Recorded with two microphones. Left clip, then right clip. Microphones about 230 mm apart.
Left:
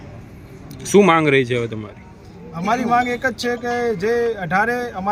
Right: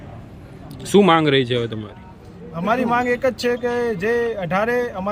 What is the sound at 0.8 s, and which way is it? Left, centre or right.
Speech, centre.